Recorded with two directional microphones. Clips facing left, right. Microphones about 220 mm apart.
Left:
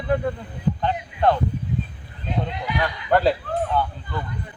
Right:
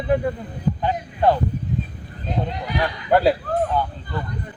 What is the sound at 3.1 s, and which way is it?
Speech, 10° right (ahead or behind).